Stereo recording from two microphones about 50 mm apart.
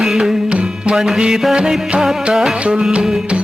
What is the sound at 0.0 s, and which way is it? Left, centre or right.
Music, centre.